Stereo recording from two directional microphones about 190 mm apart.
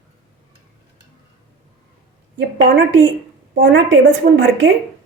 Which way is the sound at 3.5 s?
65° right (ahead or behind).